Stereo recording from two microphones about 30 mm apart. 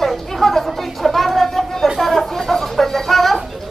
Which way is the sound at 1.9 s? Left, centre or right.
Centre.